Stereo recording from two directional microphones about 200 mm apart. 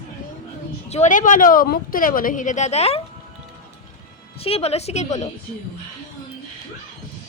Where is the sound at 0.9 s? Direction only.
40° left (ahead or behind).